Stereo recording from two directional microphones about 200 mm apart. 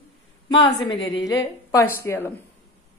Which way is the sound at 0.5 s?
20° left (ahead or behind).